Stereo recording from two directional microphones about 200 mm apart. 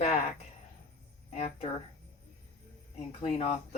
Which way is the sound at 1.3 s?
30° left (ahead or behind).